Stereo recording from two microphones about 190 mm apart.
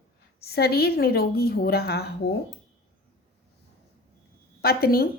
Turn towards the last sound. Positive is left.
turn(degrees=55)  # may be behind; listen again after turning